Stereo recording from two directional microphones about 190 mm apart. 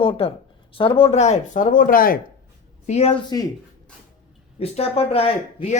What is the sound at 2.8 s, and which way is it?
Speech, 35° left (ahead or behind).